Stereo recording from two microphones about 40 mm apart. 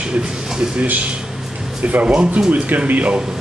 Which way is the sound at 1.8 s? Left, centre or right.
Right.